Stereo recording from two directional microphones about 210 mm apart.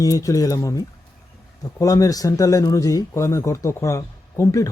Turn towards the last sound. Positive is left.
turn(degrees=15)  # may be behind; listen again after turning